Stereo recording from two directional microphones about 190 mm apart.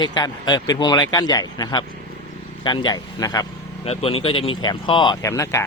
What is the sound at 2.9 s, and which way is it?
Speech, 20° left (ahead or behind).